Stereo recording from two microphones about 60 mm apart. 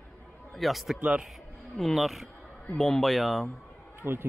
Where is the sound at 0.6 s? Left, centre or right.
Centre.